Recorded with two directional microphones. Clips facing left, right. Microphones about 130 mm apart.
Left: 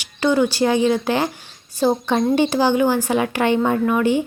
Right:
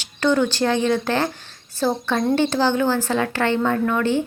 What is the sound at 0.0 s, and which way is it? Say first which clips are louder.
Speech: left 1 dB; 10° left (ahead or behind).